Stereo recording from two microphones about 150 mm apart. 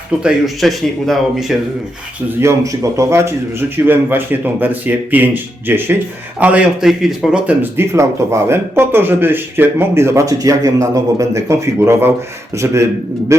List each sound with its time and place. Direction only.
0.2 s speech: 5° right (ahead or behind)
2.4 s a man's voice: 20° right (ahead or behind)